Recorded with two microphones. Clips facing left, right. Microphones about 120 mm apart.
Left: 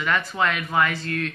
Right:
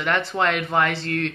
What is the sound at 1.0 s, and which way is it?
Speech, 75° right (ahead or behind).